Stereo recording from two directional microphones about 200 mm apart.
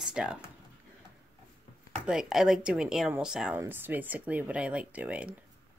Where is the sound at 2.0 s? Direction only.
5° right (ahead or behind).